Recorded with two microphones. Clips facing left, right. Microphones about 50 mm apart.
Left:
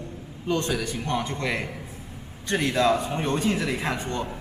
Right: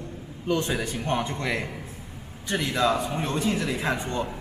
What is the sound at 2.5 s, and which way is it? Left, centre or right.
Speech, left.